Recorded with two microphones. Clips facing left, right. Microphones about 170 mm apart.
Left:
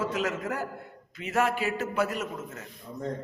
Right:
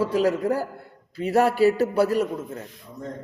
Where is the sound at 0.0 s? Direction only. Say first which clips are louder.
Right 8 dB; 35° right (ahead or behind).